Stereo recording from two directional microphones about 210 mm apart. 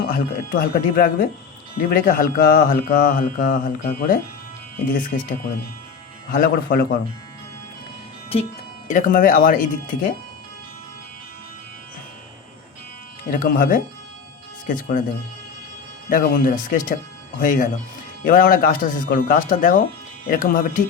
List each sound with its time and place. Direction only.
0.0 s speech: 45° left (ahead or behind)
6.3 s speech: 45° left (ahead or behind)
8.9 s speech: 40° left (ahead or behind)
13.3 s speech: 40° left (ahead or behind)
16.0 s speech: 40° left (ahead or behind)